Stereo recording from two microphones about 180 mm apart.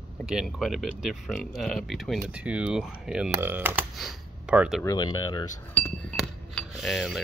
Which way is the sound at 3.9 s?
Centre (ahead or behind).